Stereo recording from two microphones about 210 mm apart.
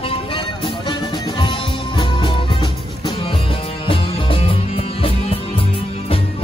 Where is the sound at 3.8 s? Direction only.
25° left (ahead or behind).